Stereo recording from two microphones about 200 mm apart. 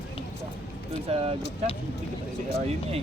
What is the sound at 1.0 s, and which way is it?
Speech, 30° right (ahead or behind).